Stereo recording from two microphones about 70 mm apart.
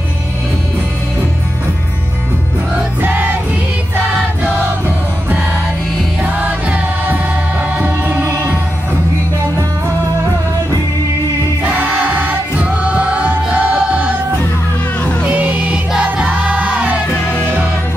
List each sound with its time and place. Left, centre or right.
3.0 s music: right
6.2 s music: right
11.6 s music: right
15.2 s music: right